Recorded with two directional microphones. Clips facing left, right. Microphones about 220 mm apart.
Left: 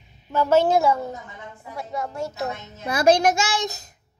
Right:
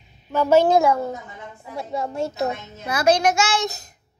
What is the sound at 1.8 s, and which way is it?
Speech, 25° right (ahead or behind).